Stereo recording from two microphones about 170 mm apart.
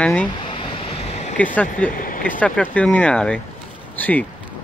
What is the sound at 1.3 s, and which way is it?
Speech, 10° left (ahead or behind).